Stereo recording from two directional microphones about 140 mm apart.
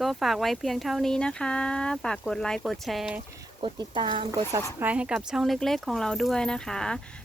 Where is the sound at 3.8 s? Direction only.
35° right (ahead or behind).